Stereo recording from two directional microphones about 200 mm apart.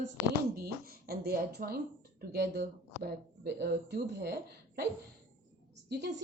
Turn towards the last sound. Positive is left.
turn(degrees=-55)  # may be behind; listen again after turning